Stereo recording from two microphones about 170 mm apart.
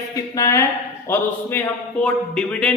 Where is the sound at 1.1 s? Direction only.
15° left (ahead or behind).